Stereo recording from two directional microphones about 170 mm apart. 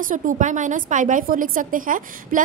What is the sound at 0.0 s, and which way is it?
A woman's voice, 50° right (ahead or behind).